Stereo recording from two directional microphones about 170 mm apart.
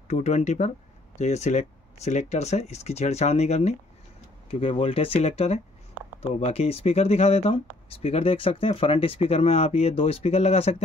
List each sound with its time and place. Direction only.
0.1 s speech: 40° left (ahead or behind)